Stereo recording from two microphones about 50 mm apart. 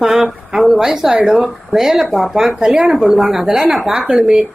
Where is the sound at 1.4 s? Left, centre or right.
Centre.